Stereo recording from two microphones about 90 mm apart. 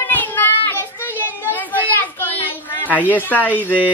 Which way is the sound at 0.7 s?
25° left (ahead or behind).